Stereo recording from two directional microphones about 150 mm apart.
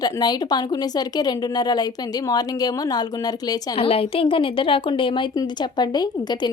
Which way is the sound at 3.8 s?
40° left (ahead or behind).